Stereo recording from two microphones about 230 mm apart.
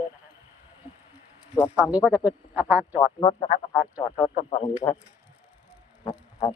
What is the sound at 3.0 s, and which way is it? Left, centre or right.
Speech, centre.